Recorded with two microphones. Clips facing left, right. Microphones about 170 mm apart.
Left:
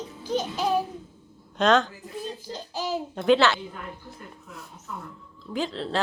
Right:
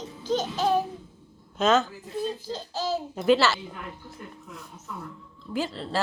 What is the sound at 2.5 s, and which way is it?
Speech, 15° left (ahead or behind).